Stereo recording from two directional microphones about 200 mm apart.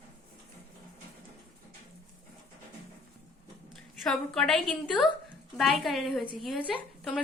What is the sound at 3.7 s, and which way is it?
A woman's voice, centre (ahead or behind).